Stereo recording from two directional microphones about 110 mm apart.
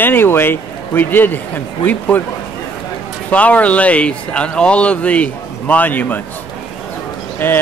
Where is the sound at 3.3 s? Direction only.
15° left (ahead or behind).